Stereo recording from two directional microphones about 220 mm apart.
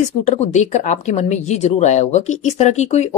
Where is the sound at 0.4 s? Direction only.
30° left (ahead or behind).